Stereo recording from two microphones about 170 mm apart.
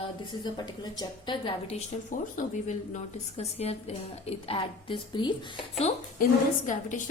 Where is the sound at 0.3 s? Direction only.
25° left (ahead or behind).